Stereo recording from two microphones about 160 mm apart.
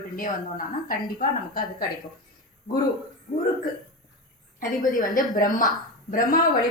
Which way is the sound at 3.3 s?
55° left (ahead or behind).